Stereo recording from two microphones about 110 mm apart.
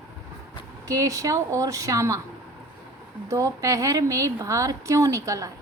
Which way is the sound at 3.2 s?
30° right (ahead or behind).